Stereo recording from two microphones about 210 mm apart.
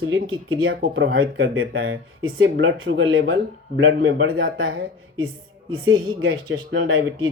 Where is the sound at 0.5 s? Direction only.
70° right (ahead or behind).